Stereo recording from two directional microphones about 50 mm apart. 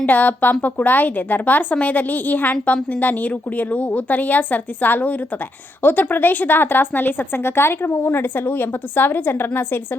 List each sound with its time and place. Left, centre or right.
0.0 s a woman's voice: left